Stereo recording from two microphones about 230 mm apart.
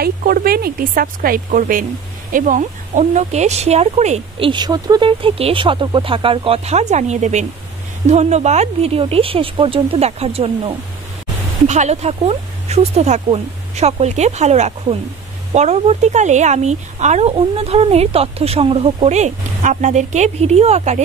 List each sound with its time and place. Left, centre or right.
0.0 s speech: right